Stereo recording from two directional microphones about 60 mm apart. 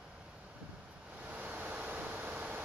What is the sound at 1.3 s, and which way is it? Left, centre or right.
Vehicle, right.